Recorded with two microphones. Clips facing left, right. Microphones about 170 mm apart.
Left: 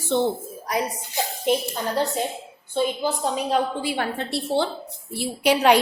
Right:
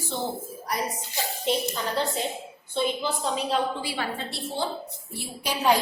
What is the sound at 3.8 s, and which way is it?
Speech, 55° left (ahead or behind).